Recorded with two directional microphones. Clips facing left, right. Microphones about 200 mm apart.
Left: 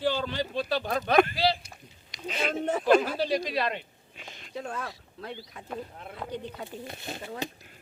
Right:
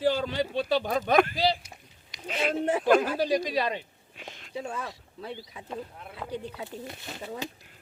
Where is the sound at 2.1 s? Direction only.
5° right (ahead or behind).